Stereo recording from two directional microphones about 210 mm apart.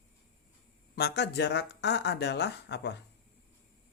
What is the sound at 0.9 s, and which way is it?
Speech, 50° left (ahead or behind).